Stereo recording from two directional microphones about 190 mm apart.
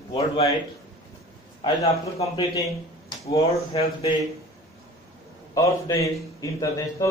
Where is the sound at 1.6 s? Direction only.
20° left (ahead or behind).